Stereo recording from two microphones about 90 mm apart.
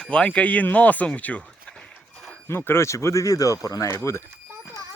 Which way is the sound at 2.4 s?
25° left (ahead or behind).